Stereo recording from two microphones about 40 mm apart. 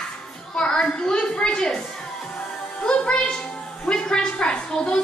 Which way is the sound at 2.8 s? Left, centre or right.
Left.